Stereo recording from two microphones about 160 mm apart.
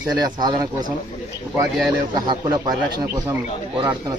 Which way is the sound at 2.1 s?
25° right (ahead or behind).